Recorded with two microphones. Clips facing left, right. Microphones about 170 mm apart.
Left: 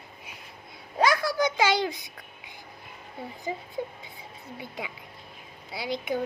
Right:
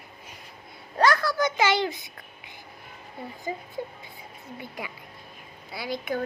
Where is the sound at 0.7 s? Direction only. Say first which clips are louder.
Right 2 dB; 10° left (ahead or behind).